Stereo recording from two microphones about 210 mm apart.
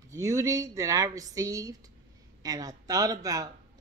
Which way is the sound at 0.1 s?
15° right (ahead or behind).